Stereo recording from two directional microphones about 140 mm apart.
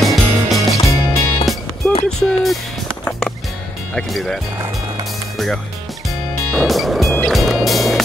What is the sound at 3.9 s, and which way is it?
Speech, 5° left (ahead or behind).